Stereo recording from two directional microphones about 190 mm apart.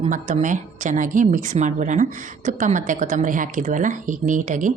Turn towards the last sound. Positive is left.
turn(degrees=-40)  # may be behind; listen again after turning